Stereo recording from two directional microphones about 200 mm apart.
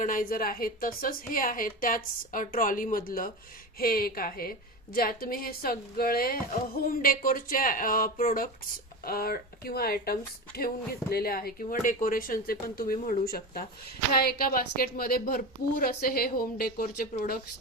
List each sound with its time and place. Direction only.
0.0 s a woman's voice: 40° left (ahead or behind)